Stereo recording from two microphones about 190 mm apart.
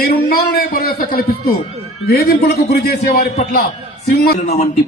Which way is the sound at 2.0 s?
55° left (ahead or behind).